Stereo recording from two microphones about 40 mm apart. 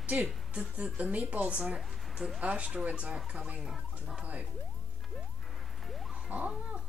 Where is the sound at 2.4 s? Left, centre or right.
Right.